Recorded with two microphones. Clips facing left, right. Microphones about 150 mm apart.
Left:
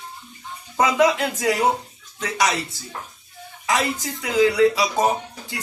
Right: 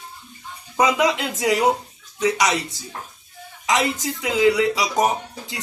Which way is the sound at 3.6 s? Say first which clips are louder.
Right 2 dB; 20° right (ahead or behind).